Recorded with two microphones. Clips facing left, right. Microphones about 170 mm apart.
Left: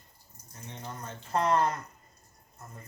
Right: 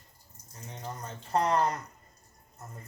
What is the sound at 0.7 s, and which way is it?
Speech, 35° right (ahead or behind).